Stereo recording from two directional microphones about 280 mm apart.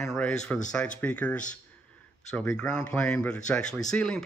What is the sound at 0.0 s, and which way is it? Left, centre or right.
Speech, centre.